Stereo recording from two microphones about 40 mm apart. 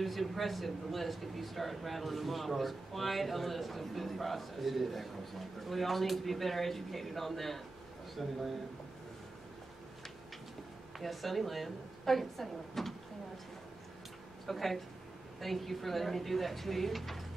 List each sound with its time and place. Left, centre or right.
0.0 s a man's voice: centre
11.0 s a man's voice: centre
14.4 s a man's voice: centre